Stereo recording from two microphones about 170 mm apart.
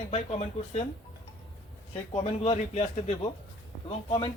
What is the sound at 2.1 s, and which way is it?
Speech, 35° left (ahead or behind).